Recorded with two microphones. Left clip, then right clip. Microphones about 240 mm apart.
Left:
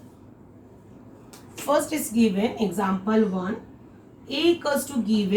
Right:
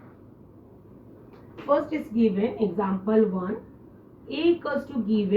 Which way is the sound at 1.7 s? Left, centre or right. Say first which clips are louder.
Left 1 dB; left.